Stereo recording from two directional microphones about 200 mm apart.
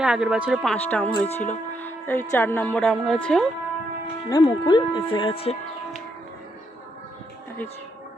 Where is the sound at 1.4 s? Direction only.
10° left (ahead or behind).